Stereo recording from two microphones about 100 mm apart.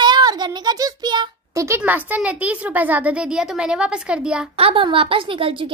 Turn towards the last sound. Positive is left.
turn(degrees=-60)  # may be behind; listen again after turning